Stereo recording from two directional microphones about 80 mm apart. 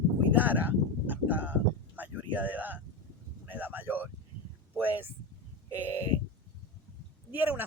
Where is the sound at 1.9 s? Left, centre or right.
Right.